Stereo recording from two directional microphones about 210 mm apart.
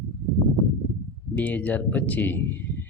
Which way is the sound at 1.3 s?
10° left (ahead or behind).